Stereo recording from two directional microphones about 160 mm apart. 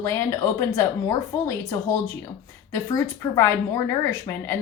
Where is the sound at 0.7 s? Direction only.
20° left (ahead or behind).